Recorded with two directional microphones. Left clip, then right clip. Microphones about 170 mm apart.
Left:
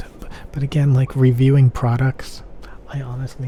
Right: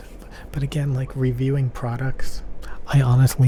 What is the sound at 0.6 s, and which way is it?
Speech, 30° left (ahead or behind).